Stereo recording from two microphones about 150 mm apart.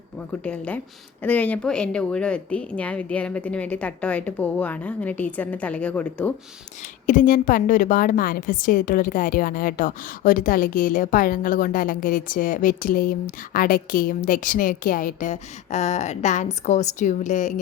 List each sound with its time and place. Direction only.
0.4 s a woman's voice: 10° left (ahead or behind)
7.1 s a woman's voice: 60° left (ahead or behind)